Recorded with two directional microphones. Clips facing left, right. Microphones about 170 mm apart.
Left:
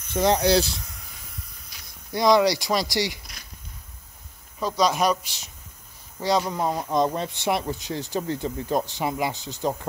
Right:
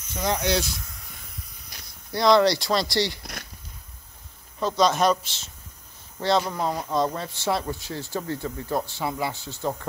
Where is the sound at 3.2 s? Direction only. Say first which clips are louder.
Right 8 dB; 60° right (ahead or behind).